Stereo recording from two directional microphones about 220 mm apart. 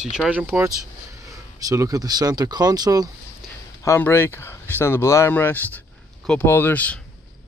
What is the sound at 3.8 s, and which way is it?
Speech, 10° left (ahead or behind).